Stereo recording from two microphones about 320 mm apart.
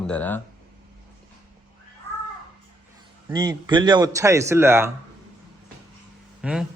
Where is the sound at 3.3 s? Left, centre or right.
Centre.